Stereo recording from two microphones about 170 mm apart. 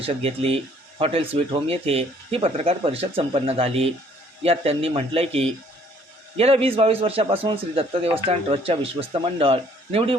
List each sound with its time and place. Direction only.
0.0 s speech: 35° right (ahead or behind)